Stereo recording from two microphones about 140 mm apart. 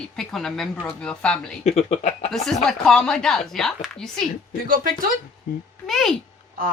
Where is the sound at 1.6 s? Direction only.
50° left (ahead or behind).